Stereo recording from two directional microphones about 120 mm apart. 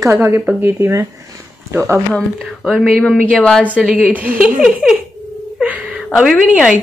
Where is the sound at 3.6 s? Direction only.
10° right (ahead or behind).